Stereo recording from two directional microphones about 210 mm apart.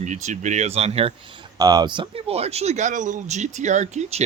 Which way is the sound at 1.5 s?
20° right (ahead or behind).